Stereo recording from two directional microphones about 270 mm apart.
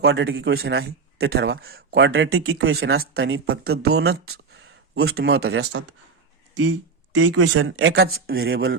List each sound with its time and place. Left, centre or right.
0.0 s speech: right
7.1 s speech: right